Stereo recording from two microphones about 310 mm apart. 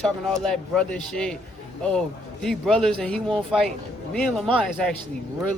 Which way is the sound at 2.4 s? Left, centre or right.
Centre.